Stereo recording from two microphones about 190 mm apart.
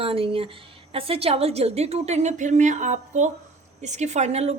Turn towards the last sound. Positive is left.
turn(degrees=-35)  # may be behind; listen again after turning